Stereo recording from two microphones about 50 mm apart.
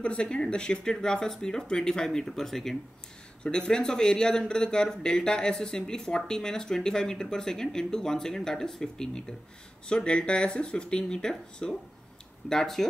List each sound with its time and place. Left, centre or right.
0.0 s speech: left; by 12.8 s centre